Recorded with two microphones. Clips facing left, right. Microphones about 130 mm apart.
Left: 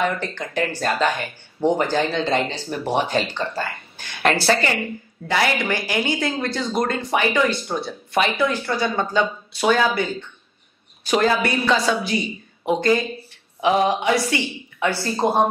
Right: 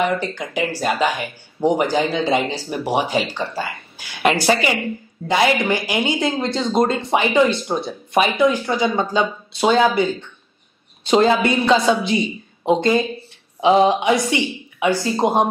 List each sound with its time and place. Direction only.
0.0 s speech: 10° right (ahead or behind)